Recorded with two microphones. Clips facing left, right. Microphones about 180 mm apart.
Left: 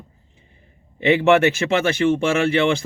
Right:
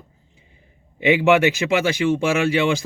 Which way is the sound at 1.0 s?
15° right (ahead or behind).